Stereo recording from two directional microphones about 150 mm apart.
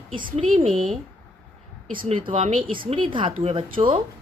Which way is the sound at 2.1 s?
35° right (ahead or behind).